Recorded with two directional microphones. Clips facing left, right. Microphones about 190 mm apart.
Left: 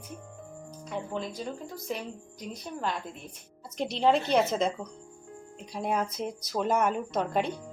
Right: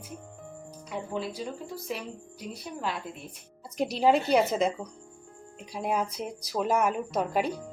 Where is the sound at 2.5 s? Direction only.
5° right (ahead or behind).